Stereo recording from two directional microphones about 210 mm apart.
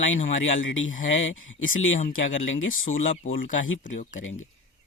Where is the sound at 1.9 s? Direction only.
40° left (ahead or behind).